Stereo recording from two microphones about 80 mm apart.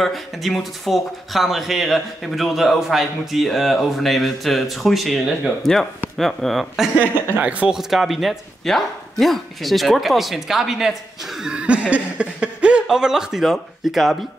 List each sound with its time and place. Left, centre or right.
0.0 s speech: centre
7.3 s speech: centre
7.7 s speech: centre
11.4 s a sound: centre
12.8 s speech: centre